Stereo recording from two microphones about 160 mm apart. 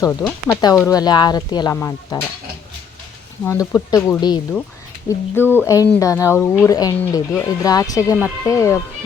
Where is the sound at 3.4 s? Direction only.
15° left (ahead or behind).